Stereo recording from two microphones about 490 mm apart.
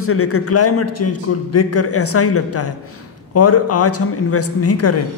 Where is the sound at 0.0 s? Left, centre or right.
Left.